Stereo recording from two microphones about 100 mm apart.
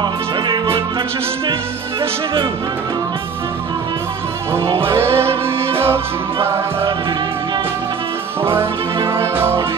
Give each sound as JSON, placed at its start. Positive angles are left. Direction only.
{"t": 1.5, "sound": "music", "side_deg": -60}
{"t": 4.8, "sound": "music", "side_deg": -25}
{"t": 9.0, "sound": "music", "side_deg": -25}